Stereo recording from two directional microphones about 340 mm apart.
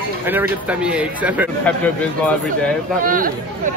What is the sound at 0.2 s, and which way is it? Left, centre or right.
Speech, centre.